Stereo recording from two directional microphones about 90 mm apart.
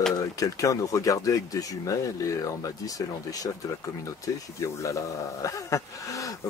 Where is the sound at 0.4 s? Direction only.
40° left (ahead or behind).